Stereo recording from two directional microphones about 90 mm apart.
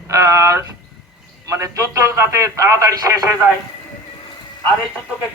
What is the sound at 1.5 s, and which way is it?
A man's voice, 35° right (ahead or behind).